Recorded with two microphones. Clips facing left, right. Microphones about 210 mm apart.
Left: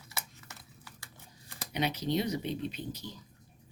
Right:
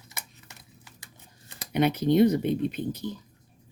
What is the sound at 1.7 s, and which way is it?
Speech, 55° right (ahead or behind).